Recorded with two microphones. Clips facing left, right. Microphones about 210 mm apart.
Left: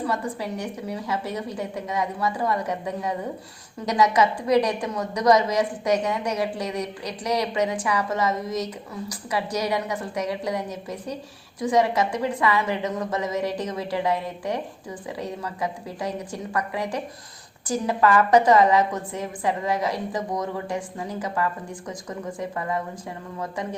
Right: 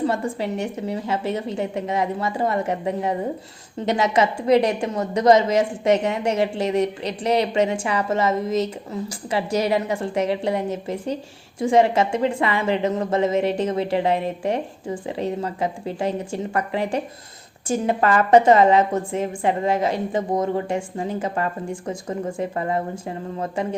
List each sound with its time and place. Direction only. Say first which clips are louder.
0.0 s a woman's voice: right 4 dB; 25° right (ahead or behind)